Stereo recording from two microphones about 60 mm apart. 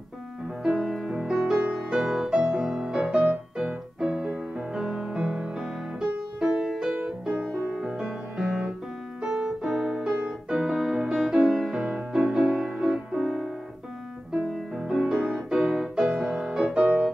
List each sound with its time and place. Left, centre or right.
0.7 s music: centre
9.2 s piano: centre
10.1 s music: centre
10.7 s music: centre
14.8 s music: centre